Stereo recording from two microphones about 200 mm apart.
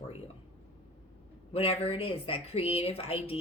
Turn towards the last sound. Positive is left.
turn(degrees=30)  # may be behind; listen again after turning